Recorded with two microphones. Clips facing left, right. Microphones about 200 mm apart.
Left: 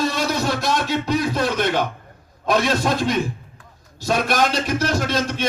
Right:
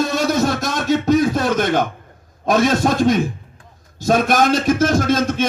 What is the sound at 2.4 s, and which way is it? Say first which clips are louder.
A man's voice: right 4 dB; 45° right (ahead or behind).